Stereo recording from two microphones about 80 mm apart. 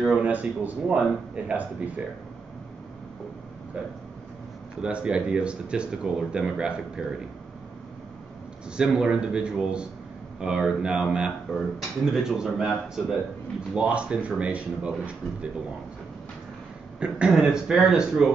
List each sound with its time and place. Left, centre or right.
0.2 s a man's voice: centre
4.8 s speech: centre
8.7 s speech: centre
17.0 s speech: centre